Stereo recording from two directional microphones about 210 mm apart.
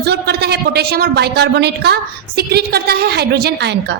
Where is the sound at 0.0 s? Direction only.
50° right (ahead or behind).